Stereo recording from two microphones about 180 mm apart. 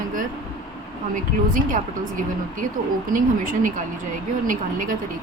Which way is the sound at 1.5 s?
45° right (ahead or behind).